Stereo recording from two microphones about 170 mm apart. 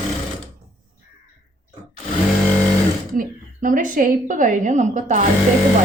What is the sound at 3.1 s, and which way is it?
A woman's voice, 55° right (ahead or behind).